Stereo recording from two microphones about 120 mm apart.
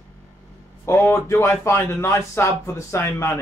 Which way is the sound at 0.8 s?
20° left (ahead or behind).